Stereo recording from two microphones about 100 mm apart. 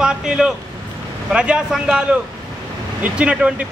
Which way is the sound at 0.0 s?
5° right (ahead or behind).